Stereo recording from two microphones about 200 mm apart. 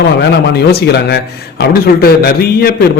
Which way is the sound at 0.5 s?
55° left (ahead or behind).